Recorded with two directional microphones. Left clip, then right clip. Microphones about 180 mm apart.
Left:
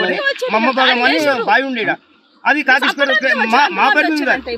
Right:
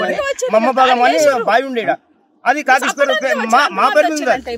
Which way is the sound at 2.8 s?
25° right (ahead or behind).